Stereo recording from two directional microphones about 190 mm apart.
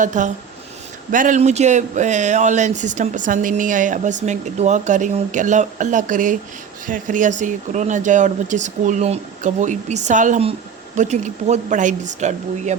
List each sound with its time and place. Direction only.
0.0 s speech: 40° right (ahead or behind)